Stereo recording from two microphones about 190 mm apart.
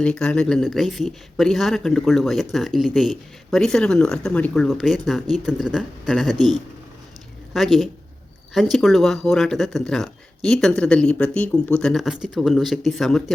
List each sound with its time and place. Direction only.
0.0 s speech: 5° left (ahead or behind)
7.5 s speech: centre (ahead or behind)